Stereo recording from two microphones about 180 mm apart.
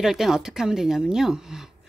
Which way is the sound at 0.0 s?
Centre (ahead or behind).